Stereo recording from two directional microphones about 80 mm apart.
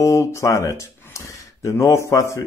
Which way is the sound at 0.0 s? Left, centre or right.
Left.